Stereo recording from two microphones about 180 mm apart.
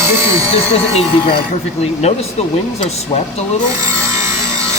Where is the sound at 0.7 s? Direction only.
30° left (ahead or behind).